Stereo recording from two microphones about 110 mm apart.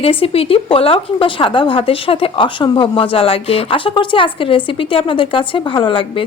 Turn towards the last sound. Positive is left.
turn(degrees=50)  # may be behind; listen again after turning